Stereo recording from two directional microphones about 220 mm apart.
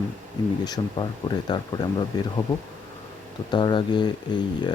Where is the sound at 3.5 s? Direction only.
20° left (ahead or behind).